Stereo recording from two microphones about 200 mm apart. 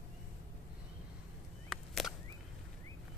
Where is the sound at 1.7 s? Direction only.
Centre (ahead or behind).